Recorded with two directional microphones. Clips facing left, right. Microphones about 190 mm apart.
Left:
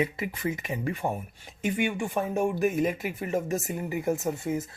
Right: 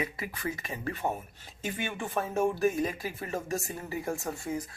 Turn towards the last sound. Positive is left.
turn(degrees=20)  # may be behind; listen again after turning